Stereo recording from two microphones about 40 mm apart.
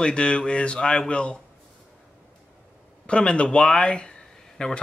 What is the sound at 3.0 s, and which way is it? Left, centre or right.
Speech, left.